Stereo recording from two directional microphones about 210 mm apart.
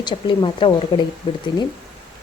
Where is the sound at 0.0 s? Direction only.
20° left (ahead or behind).